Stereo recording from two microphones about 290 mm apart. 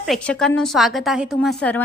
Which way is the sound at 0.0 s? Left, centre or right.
Centre.